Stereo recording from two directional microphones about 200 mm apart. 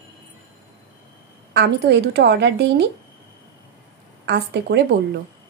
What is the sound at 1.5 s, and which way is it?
A woman's voice, 55° right (ahead or behind).